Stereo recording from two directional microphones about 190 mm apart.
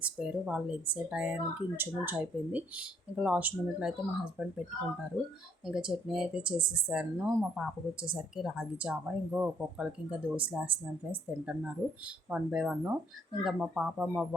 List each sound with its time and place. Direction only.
0.0 s a woman's voice: 5° right (ahead or behind)
5.6 s a woman's voice: 5° right (ahead or behind)